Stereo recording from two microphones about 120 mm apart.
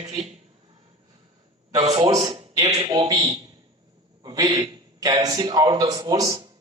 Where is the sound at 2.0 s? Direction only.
30° right (ahead or behind).